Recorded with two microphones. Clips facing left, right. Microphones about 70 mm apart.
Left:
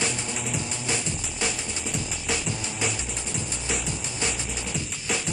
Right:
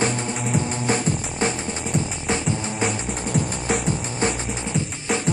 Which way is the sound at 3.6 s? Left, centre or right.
Right.